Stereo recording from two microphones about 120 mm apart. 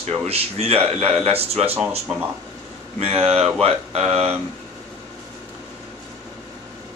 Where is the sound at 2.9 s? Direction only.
55° right (ahead or behind).